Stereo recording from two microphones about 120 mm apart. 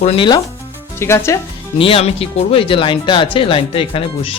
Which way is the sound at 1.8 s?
50° left (ahead or behind).